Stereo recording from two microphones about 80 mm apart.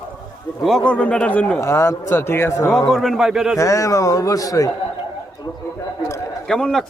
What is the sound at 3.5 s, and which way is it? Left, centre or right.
A man's voice, left.